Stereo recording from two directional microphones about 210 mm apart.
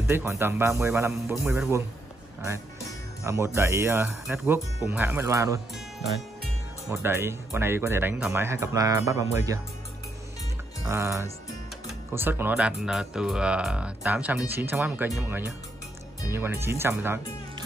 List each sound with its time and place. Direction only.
0.0 s speech: 10° right (ahead or behind)
3.3 s speech: 15° right (ahead or behind)
6.9 s speech: 10° right (ahead or behind)
10.9 s speech: 10° right (ahead or behind)